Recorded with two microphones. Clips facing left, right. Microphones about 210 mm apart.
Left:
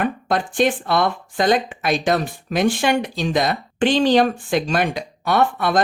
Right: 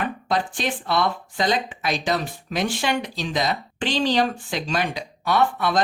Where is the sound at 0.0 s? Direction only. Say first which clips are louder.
Left 3 dB; 50° left (ahead or behind).